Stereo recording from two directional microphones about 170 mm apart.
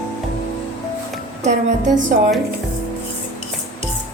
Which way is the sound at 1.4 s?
45° right (ahead or behind).